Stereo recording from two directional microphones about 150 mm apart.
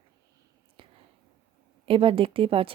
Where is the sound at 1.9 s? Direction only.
35° right (ahead or behind).